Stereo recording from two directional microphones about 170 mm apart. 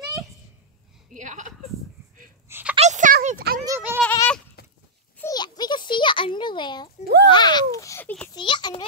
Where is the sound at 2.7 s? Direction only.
45° right (ahead or behind).